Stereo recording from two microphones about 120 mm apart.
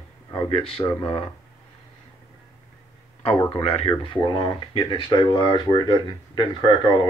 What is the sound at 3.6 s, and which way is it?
Speech, 55° left (ahead or behind).